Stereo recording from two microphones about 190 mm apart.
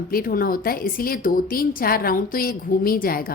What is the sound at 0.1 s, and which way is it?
A woman's voice, 50° left (ahead or behind).